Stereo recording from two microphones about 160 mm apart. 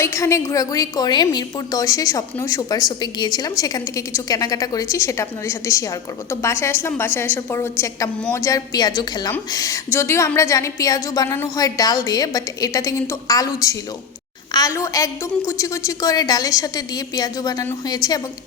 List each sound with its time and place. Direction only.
0.0 s a woman's voice: 20° left (ahead or behind)
14.5 s a woman's voice: 20° left (ahead or behind)